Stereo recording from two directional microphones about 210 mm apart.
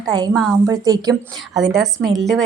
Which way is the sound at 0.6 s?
15° right (ahead or behind).